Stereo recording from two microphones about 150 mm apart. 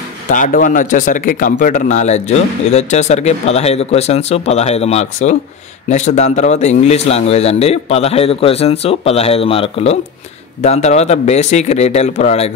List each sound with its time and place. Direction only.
0.3 s speech: 60° left (ahead or behind); by 12.5 s 45° left (ahead or behind)